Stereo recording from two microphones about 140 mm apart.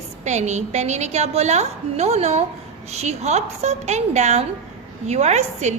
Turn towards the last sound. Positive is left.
turn(degrees=-55)  # may be behind; listen again after turning